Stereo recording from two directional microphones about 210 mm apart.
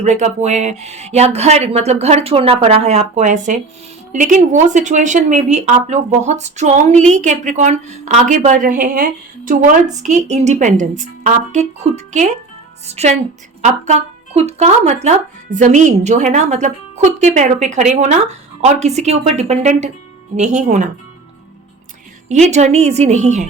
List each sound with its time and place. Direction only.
0.0 s a woman's voice: 35° right (ahead or behind)
14.3 s a woman's voice: 30° right (ahead or behind)
22.4 s a woman's voice: 30° right (ahead or behind)